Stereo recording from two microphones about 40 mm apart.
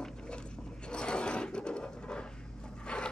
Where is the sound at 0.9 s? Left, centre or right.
Left.